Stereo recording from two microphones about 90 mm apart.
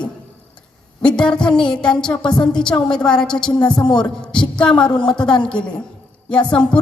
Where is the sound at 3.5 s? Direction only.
50° left (ahead or behind).